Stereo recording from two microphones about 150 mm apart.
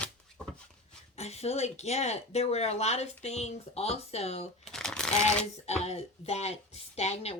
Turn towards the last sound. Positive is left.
turn(degrees=45)  # may be behind; listen again after turning